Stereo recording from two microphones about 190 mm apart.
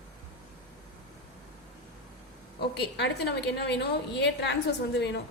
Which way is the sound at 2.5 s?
60° left (ahead or behind).